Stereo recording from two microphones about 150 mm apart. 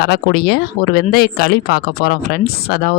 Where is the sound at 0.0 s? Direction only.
90° left.